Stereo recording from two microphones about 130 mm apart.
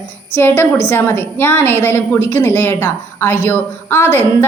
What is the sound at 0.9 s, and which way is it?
A woman's voice, 20° left (ahead or behind).